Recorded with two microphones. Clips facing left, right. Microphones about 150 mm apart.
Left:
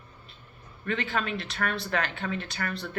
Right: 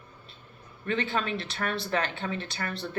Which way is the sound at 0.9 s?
30° right (ahead or behind).